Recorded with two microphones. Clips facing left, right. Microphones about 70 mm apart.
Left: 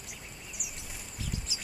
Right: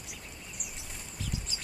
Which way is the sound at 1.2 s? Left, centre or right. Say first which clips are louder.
Even; centre.